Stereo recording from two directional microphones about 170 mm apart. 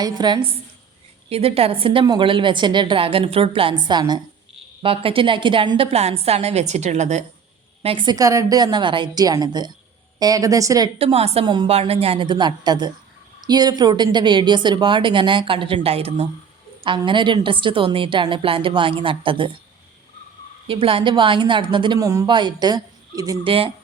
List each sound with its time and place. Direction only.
0.0 s a woman's voice: 25° right (ahead or behind)
1.3 s a woman's voice: 35° right (ahead or behind)
7.8 s a woman's voice: 30° right (ahead or behind)
10.9 s a woman's voice: 35° right (ahead or behind)
20.7 s a woman's voice: 30° right (ahead or behind)